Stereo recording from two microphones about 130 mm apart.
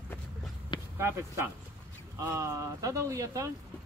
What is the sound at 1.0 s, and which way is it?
Speech, 25° right (ahead or behind).